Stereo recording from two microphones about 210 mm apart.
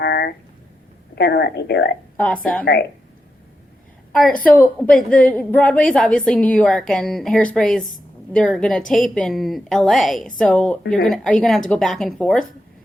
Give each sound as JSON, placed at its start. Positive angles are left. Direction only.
{"t": 0.0, "sound": "a sound", "side_deg": 50}
{"t": 1.1, "sound": "speech", "side_deg": 50}
{"t": 2.1, "sound": "a woman's voice", "side_deg": 5}
{"t": 5.0, "sound": "a woman's voice", "side_deg": 5}